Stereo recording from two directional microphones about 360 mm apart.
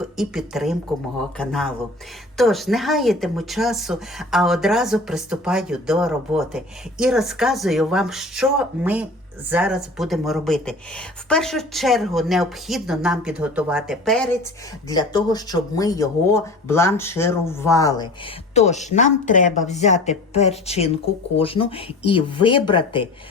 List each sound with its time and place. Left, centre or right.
0.2 s a woman's voice: centre